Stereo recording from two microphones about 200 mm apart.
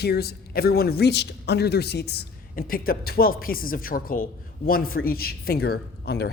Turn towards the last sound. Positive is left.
turn(degrees=55)  # may be behind; listen again after turning